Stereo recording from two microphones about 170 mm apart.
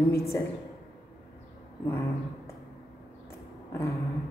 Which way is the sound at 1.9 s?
15° left (ahead or behind).